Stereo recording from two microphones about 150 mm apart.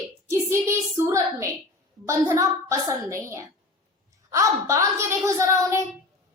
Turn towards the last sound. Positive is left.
turn(degrees=-20)  # may be behind; listen again after turning